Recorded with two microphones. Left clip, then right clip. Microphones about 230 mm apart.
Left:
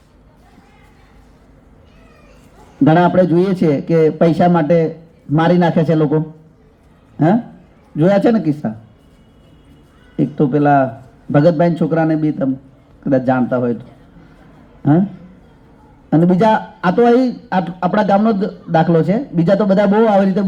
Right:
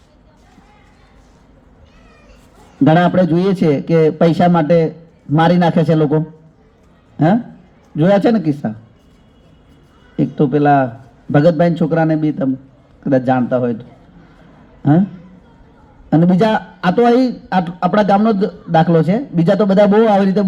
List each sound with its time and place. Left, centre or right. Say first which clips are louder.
2.8 s a man's voice: left 1 dB; right
10.2 s a man's voice: right 1 dB; right
16.0 s a man's voice: left 1 dB; right